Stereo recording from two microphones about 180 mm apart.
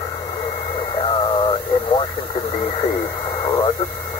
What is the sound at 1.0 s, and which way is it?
Radio, 30° left (ahead or behind).